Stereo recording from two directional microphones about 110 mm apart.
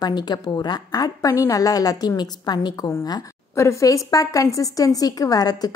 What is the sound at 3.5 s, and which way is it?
A woman's voice, 25° left (ahead or behind).